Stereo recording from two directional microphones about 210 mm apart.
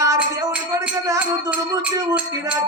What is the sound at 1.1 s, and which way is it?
Music, 5° right (ahead or behind).